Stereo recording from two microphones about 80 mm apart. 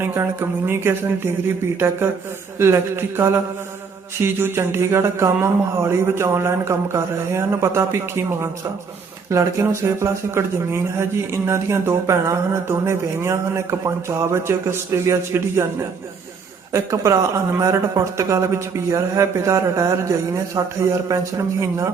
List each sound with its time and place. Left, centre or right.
0.0 s speech: right
2.6 s a man's voice: right